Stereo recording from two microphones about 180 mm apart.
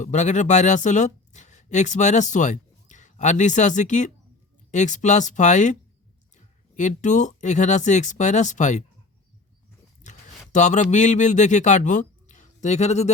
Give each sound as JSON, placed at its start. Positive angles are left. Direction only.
{"t": 0.0, "sound": "speech", "side_deg": 40}
{"t": 10.0, "sound": "a sound", "side_deg": 45}
{"t": 10.5, "sound": "speech", "side_deg": 40}